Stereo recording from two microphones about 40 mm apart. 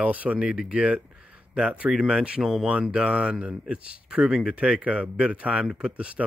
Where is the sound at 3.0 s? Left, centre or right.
Right.